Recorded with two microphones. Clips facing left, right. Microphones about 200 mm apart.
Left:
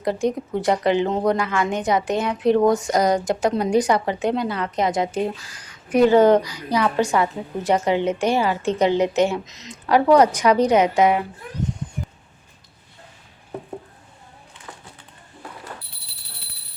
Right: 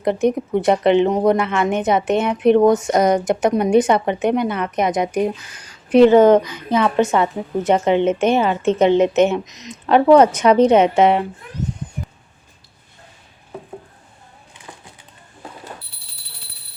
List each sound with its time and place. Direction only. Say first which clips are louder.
0.0 s speech: right 4 dB; 20° right (ahead or behind)